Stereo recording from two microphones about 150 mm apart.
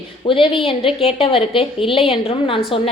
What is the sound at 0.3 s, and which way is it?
A woman's voice, 35° left (ahead or behind).